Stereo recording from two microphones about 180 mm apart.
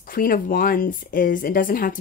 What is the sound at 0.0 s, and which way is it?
Speech, 50° left (ahead or behind).